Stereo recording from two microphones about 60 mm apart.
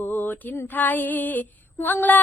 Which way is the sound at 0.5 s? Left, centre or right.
Left.